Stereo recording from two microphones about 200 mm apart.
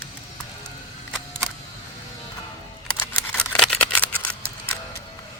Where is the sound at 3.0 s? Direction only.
5° left (ahead or behind).